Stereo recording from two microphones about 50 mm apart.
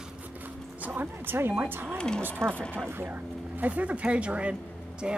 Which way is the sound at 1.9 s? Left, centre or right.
Centre.